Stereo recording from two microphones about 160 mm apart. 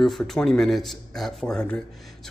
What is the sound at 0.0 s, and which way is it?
A man's voice, 5° left (ahead or behind).